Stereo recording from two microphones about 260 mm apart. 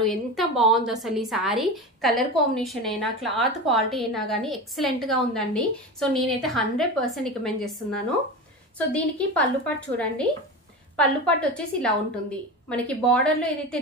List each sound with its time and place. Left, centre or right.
0.0 s a woman's voice: centre
8.7 s a woman's voice: centre